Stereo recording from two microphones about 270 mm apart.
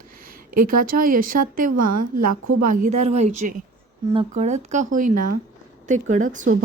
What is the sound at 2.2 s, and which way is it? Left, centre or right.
Speech, right.